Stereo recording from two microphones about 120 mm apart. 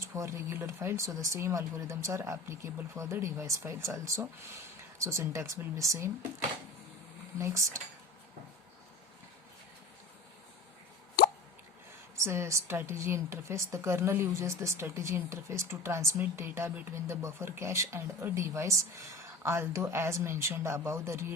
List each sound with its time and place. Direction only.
0.0 s a woman's voice: 25° right (ahead or behind)
7.3 s a woman's voice: 25° right (ahead or behind)
12.1 s a woman's voice: 25° right (ahead or behind)